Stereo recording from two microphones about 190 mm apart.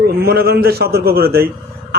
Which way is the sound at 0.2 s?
55° right (ahead or behind).